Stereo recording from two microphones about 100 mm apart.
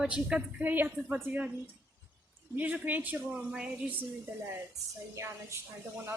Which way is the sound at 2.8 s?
15° right (ahead or behind).